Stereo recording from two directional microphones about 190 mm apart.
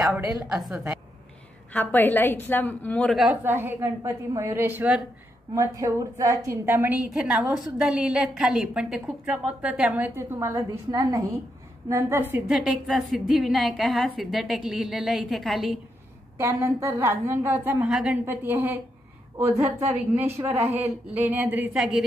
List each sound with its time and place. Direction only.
0.0 s a woman's voice: 5° right (ahead or behind)
1.7 s a woman's voice: 10° left (ahead or behind)
16.3 s a woman's voice: 10° right (ahead or behind)